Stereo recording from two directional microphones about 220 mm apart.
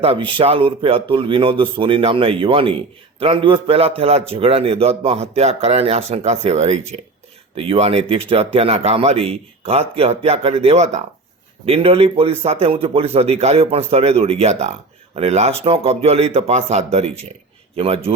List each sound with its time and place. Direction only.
0.0 s a man's voice: 25° right (ahead or behind)